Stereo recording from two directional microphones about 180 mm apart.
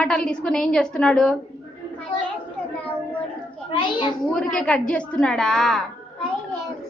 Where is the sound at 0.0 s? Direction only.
5° left (ahead or behind).